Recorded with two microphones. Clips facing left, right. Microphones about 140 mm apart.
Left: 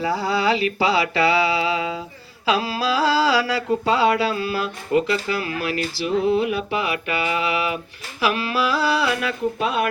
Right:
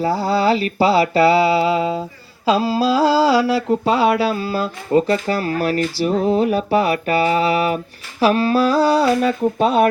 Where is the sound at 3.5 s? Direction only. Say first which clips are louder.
Right 4 dB; 25° right (ahead or behind).